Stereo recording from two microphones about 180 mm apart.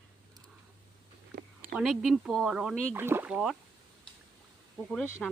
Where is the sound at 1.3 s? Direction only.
70° right (ahead or behind).